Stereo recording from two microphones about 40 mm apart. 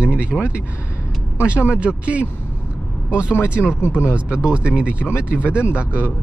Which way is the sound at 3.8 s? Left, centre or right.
Left.